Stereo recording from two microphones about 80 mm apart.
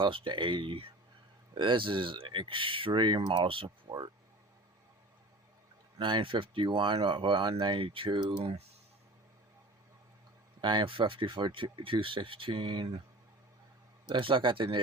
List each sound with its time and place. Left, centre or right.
0.0 s speech: right
6.0 s speech: right
10.6 s speech: right
14.1 s speech: right